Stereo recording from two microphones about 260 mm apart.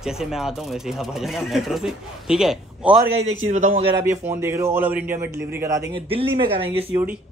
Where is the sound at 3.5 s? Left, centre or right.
Right.